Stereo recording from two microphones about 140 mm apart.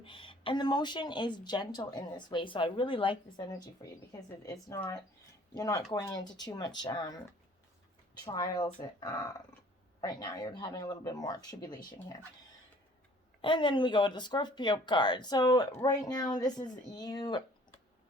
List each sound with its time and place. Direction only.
0.0 s speech: 40° left (ahead or behind)
4.1 s speech: 25° left (ahead or behind)
8.2 s speech: 30° left (ahead or behind)
13.4 s speech: 35° left (ahead or behind)